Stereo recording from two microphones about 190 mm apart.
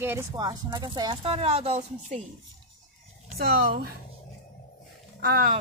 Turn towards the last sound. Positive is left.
turn(degrees=-50)  # may be behind; listen again after turning